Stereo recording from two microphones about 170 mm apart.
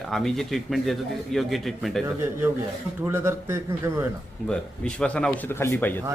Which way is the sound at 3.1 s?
15° right (ahead or behind).